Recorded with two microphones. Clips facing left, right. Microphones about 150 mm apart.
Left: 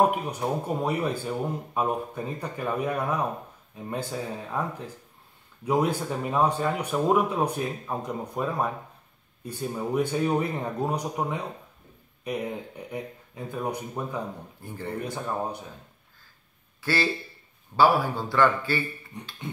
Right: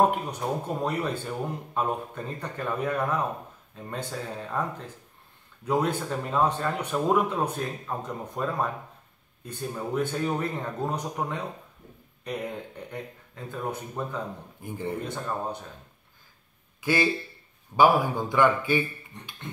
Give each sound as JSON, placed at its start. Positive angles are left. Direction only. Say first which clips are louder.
{"t": 0.1, "sound": "speech", "louder": "left 1 dB", "side_deg": 10}
{"t": 9.8, "sound": "speech", "louder": "left 2 dB", "side_deg": 15}
{"t": 14.6, "sound": "speech", "louder": "right 3 dB", "side_deg": -15}
{"t": 15.0, "sound": "speech", "louder": "left 1 dB", "side_deg": 15}
{"t": 16.8, "sound": "speech", "louder": "right 2 dB", "side_deg": -15}